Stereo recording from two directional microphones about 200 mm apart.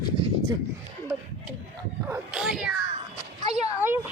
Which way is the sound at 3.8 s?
10° right (ahead or behind).